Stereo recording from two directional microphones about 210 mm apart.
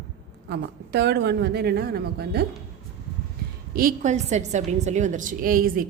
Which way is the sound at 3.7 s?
45° right (ahead or behind).